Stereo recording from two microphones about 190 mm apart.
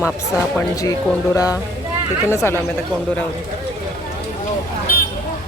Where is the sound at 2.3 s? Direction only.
15° left (ahead or behind).